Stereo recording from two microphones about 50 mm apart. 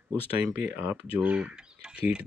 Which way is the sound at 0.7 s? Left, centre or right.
Right.